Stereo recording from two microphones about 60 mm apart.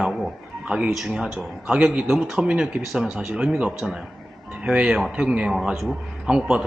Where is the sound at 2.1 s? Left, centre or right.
Centre.